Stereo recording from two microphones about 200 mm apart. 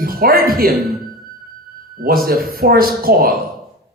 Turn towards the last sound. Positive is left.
turn(degrees=-45)  # may be behind; listen again after turning